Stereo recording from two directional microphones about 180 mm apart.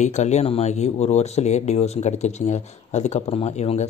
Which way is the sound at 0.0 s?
40° left (ahead or behind).